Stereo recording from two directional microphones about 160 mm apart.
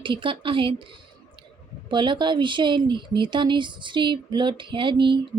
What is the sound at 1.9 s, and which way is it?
Speech, 30° right (ahead or behind).